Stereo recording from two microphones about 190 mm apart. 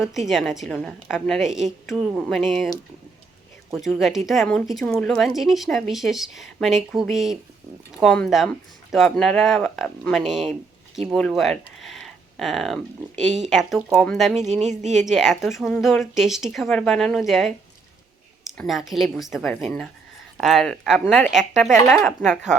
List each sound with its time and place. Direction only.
0.0 s a woman's voice: centre (ahead or behind)
3.7 s a woman's voice: centre (ahead or behind)
14.6 s speech: 40° right (ahead or behind)
14.9 s a woman's voice: centre (ahead or behind)